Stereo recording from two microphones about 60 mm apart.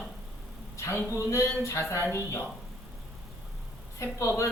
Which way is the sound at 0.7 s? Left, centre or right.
Left.